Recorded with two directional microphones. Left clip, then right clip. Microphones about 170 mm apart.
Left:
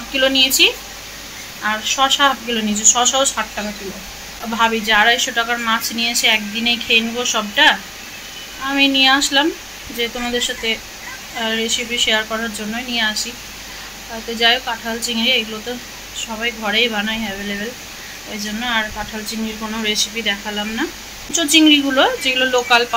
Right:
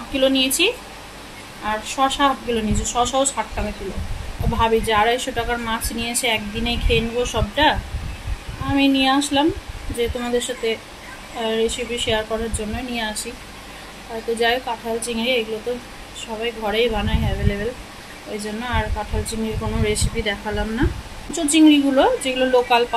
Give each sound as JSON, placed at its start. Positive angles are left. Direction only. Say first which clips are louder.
{"t": 0.1, "sound": "a woman's voice", "louder": "left 4 dB", "side_deg": 0}
{"t": 4.6, "sound": "a woman's voice", "louder": "left 3 dB", "side_deg": -5}
{"t": 14.4, "sound": "a woman's voice", "louder": "left 6 dB", "side_deg": -5}
{"t": 18.6, "sound": "a woman's voice", "louder": "left 5 dB", "side_deg": -10}